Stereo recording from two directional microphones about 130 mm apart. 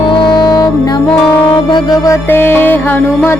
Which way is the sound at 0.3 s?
30° left (ahead or behind).